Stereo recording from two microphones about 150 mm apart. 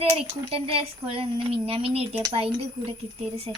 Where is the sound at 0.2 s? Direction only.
40° right (ahead or behind).